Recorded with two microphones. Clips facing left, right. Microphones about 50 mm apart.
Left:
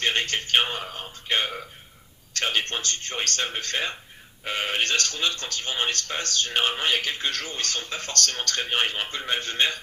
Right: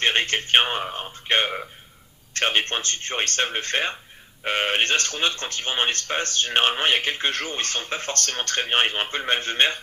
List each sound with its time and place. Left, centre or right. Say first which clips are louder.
0.0 s a man's voice: right 3 dB; right